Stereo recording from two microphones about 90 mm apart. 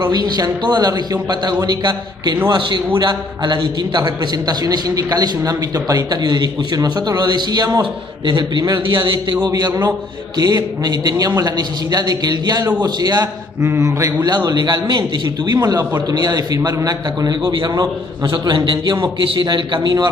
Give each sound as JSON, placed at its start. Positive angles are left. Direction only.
{"t": 0.0, "sound": "a man's voice", "side_deg": -50}
{"t": 13.6, "sound": "mantra", "side_deg": -30}
{"t": 14.2, "sound": "a man's voice", "side_deg": -50}